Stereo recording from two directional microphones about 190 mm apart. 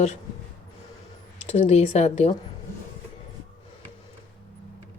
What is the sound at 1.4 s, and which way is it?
Speech, 35° left (ahead or behind).